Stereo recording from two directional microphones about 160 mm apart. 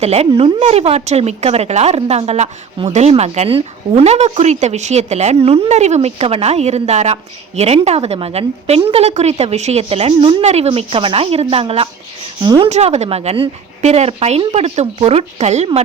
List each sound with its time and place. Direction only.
0.0 s speech: 40° right (ahead or behind)